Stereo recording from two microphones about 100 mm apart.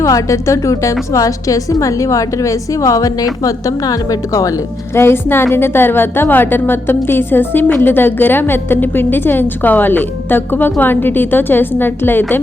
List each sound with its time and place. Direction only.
0.0 s a woman's voice: 30° left (ahead or behind)
4.9 s a woman's voice: 25° left (ahead or behind)